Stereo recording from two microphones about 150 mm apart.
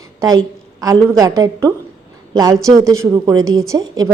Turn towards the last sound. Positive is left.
turn(degrees=-25)  # may be behind; listen again after turning